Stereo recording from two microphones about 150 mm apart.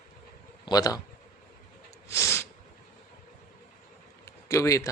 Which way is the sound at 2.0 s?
20° left (ahead or behind).